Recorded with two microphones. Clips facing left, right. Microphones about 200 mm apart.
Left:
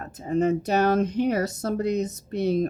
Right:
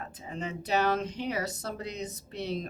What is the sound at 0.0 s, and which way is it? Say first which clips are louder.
Speech: left 14 dB; 45° left (ahead or behind).